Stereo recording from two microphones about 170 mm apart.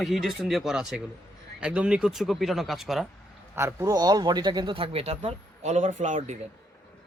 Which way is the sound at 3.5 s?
15° right (ahead or behind).